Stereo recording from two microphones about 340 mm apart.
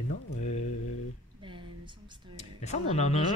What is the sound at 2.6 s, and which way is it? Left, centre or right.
Speech, centre.